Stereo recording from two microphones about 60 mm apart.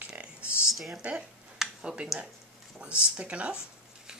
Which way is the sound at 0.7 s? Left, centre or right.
Centre.